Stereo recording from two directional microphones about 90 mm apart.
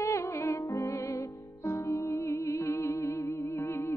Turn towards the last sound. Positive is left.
turn(degrees=30)  # may be behind; listen again after turning